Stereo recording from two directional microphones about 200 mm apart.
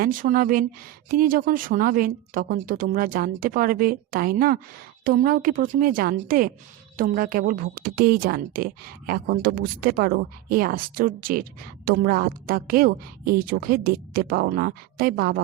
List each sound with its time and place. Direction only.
0.0 s a woman's voice: 45° right (ahead or behind)